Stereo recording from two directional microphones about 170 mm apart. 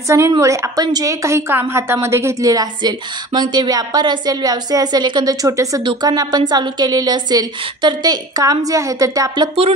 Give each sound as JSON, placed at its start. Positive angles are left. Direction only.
{"t": 0.3, "sound": "a woman's voice", "side_deg": -20}